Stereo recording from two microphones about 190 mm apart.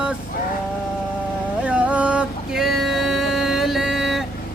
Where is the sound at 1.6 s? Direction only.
5° right (ahead or behind).